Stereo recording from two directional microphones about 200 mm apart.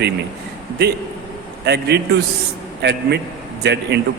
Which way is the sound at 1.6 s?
55° right (ahead or behind).